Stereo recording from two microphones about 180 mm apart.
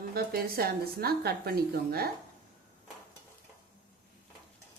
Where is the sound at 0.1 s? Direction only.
55° right (ahead or behind).